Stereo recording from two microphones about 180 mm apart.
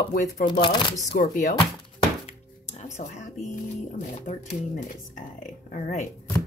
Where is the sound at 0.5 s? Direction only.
25° left (ahead or behind).